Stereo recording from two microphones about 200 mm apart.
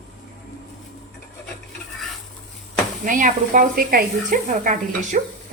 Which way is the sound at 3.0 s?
40° right (ahead or behind).